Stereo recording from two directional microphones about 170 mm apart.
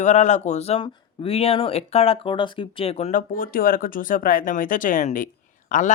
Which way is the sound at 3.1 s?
55° left (ahead or behind).